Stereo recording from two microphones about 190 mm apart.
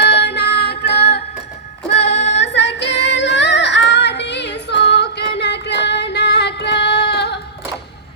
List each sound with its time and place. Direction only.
0.0 s music: 60° left (ahead or behind)
1.9 s female singing: 65° left (ahead or behind)